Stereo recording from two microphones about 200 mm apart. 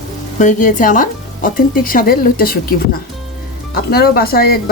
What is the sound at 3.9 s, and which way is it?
Speech, 50° left (ahead or behind).